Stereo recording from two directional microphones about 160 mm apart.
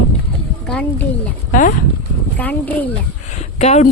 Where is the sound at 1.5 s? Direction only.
55° left (ahead or behind).